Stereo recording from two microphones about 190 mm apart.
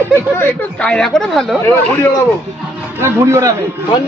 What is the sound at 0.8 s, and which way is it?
A man's voice, 5° left (ahead or behind).